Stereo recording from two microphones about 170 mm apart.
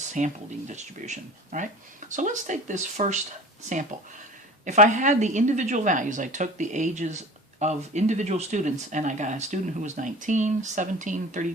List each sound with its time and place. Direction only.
0.2 s speech: 45° right (ahead or behind)
4.6 s speech: 45° right (ahead or behind)